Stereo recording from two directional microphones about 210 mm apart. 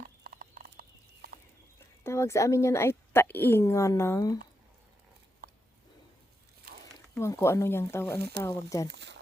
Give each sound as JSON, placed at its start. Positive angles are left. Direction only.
{"t": 0.0, "sound": "a sound", "side_deg": -40}
{"t": 2.0, "sound": "speech", "side_deg": 10}
{"t": 5.4, "sound": "a sound", "side_deg": -45}
{"t": 7.1, "sound": "speech", "side_deg": 15}
{"t": 8.2, "sound": "speech", "side_deg": -50}
{"t": 8.4, "sound": "speech", "side_deg": 15}
{"t": 8.9, "sound": "speech", "side_deg": -55}